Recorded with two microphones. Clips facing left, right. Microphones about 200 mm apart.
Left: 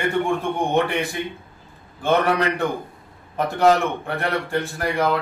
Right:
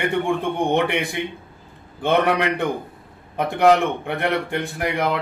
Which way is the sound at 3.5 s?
20° right (ahead or behind).